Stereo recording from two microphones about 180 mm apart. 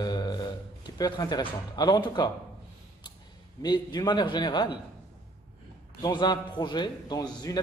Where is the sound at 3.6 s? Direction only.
25° left (ahead or behind).